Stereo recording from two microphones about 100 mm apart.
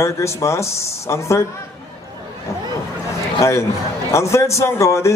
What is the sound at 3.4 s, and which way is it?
Speech, 30° left (ahead or behind).